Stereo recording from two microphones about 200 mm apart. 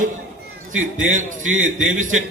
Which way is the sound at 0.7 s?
90° right.